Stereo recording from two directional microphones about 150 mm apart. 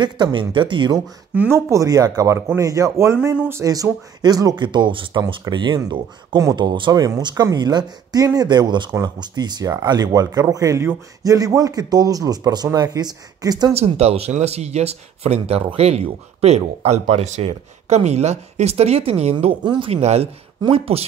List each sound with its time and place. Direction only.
0.0 s speech: 30° right (ahead or behind)
1.3 s speech: 15° right (ahead or behind)
13.7 s speech: 45° right (ahead or behind)
19.3 s speech: 30° right (ahead or behind)